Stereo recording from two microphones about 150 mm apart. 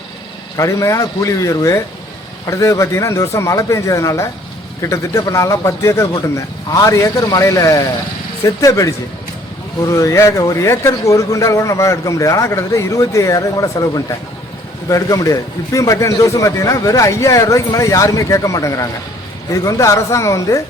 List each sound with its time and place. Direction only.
0.5 s speech: 20° left (ahead or behind)